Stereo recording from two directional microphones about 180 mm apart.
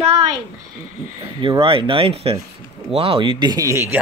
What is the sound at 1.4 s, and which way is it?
Speech, 25° right (ahead or behind).